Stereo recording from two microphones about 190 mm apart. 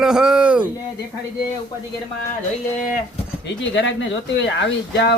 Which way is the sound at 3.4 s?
75° left (ahead or behind).